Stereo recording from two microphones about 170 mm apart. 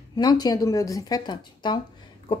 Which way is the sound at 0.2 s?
25° left (ahead or behind).